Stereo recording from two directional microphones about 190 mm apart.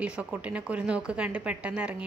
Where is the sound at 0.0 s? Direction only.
5° right (ahead or behind).